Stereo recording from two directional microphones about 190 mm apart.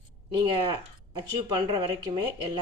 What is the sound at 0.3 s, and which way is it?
Speech, 25° right (ahead or behind).